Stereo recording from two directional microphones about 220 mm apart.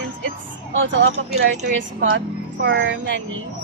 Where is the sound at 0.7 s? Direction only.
60° right (ahead or behind).